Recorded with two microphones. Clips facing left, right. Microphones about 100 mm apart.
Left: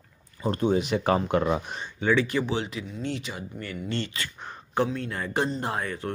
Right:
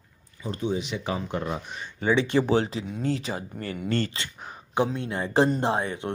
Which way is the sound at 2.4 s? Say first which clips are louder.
Right 6 dB; 40° right (ahead or behind).